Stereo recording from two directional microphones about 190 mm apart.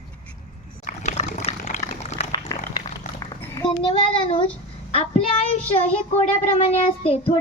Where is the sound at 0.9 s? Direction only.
40° left (ahead or behind).